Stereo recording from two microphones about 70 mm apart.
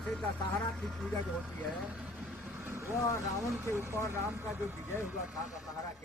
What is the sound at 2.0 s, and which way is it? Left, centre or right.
Vehicle, centre.